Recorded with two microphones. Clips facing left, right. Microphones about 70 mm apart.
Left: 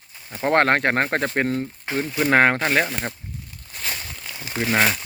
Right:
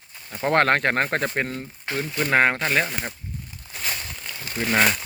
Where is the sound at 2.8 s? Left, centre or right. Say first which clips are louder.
Left 2 dB; centre.